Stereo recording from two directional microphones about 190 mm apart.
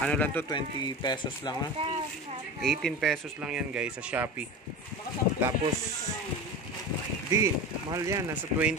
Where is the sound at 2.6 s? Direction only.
Centre (ahead or behind).